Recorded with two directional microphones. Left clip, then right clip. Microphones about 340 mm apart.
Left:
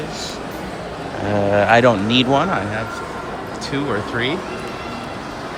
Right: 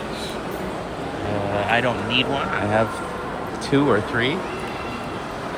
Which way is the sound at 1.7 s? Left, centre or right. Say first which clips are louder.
Left 8 dB; left.